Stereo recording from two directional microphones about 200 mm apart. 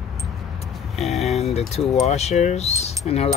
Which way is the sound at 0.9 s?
Centre (ahead or behind).